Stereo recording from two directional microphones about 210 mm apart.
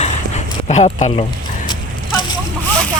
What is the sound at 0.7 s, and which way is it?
Speech, 30° left (ahead or behind).